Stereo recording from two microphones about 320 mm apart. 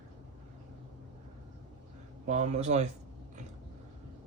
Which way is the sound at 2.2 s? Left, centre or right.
Right.